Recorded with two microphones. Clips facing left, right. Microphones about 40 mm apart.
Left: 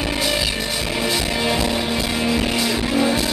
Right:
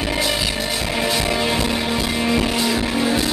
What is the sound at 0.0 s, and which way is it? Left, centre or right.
Music, centre.